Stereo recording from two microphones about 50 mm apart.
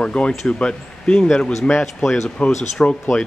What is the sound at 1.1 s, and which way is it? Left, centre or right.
Speech, centre.